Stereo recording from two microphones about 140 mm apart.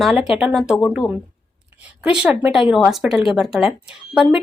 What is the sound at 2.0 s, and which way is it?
A woman's voice, 10° right (ahead or behind).